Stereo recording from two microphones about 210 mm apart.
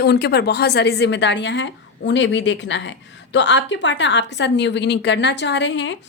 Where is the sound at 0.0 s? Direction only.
50° left (ahead or behind).